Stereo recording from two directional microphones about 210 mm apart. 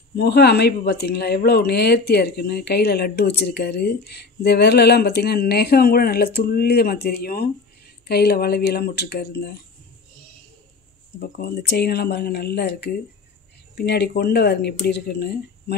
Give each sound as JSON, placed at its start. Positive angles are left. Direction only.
{"t": 0.1, "sound": "speech", "side_deg": 50}
{"t": 11.1, "sound": "speech", "side_deg": 50}